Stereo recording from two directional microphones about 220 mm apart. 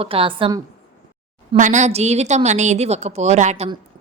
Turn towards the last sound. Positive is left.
turn(degrees=-30)  # may be behind; listen again after turning